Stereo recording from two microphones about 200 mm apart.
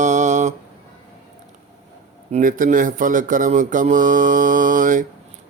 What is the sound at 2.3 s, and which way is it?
Speech, 40° right (ahead or behind).